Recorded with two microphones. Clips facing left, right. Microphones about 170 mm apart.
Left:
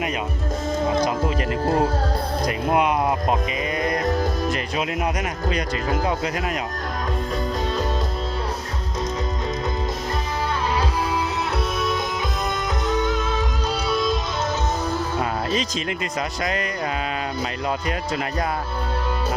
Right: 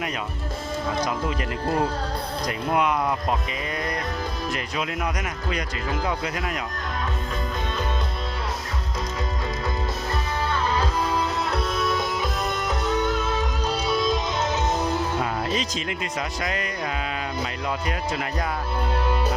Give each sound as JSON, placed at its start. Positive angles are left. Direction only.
{"t": 2.5, "sound": "speech", "side_deg": 20}
{"t": 5.5, "sound": "speech", "side_deg": 35}
{"t": 10.8, "sound": "music", "side_deg": 5}
{"t": 16.4, "sound": "speech", "side_deg": 35}